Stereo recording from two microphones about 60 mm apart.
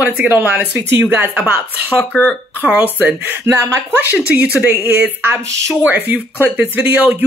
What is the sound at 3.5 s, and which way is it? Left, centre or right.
Speech, right.